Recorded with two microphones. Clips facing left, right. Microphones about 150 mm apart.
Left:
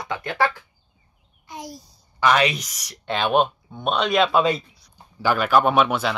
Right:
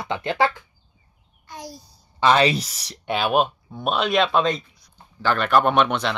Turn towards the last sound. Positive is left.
turn(degrees=5)  # may be behind; listen again after turning